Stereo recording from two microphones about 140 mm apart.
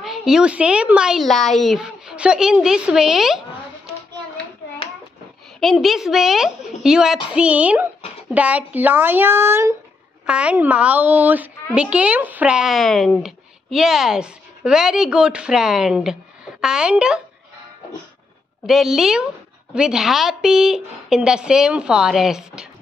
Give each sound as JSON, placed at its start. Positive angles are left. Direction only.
{"t": 0.0, "sound": "speech", "side_deg": 0}
{"t": 5.6, "sound": "speech", "side_deg": 0}
{"t": 18.7, "sound": "speech", "side_deg": 0}